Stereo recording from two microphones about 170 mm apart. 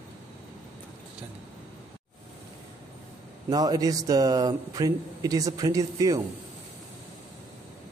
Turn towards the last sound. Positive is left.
turn(degrees=-20)  # may be behind; listen again after turning